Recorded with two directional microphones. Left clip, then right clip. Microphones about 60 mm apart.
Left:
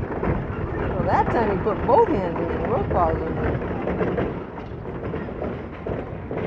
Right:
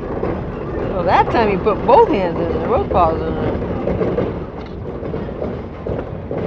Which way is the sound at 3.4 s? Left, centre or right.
Left.